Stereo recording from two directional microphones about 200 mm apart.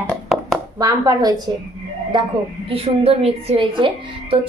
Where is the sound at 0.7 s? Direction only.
20° right (ahead or behind).